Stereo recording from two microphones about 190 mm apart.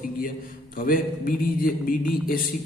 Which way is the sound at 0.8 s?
45° left (ahead or behind).